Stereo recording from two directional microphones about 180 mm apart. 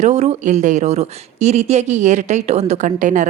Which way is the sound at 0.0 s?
40° right (ahead or behind).